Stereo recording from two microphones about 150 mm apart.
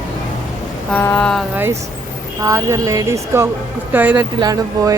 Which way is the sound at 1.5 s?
15° right (ahead or behind).